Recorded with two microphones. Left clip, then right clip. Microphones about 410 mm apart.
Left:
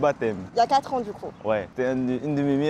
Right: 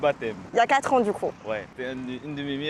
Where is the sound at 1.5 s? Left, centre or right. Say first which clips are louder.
Left 7 dB; left.